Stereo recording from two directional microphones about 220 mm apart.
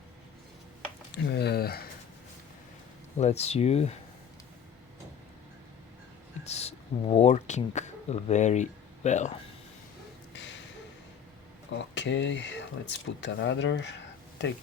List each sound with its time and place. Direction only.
1.1 s speech: 50° left (ahead or behind)
3.2 s speech: 30° left (ahead or behind)
6.4 s speech: 30° left (ahead or behind)
11.7 s speech: 55° left (ahead or behind)